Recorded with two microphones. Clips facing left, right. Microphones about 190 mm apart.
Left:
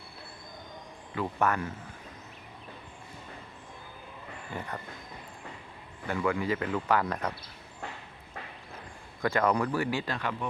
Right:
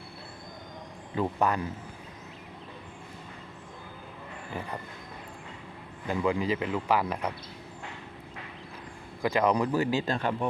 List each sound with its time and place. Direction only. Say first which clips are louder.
1.1 s speech: right 2 dB; 15° right (ahead or behind)
6.1 s speech: right 2 dB; 15° right (ahead or behind)
9.2 s speech: right 2 dB; 15° right (ahead or behind); by 10.5 s 30° right (ahead or behind)